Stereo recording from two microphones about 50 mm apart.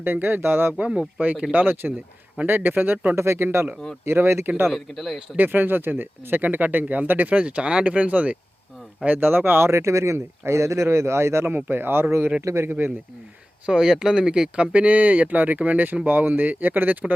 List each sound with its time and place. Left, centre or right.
0.0 s speech: right
1.2 s speech: right
1.6 s speech: right
3.2 s speech: right
4.7 s speech: centre
5.4 s speech: right
9.0 s speech: right
11.5 s speech: right
12.5 s speech: right
13.7 s speech: centre; by 17.2 s right